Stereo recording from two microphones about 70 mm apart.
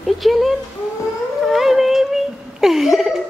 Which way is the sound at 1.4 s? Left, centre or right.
Centre.